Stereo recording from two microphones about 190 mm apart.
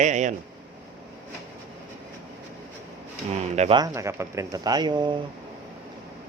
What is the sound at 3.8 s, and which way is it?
Speech, 15° right (ahead or behind).